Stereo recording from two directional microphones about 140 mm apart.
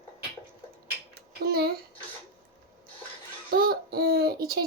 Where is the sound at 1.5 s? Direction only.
90° right.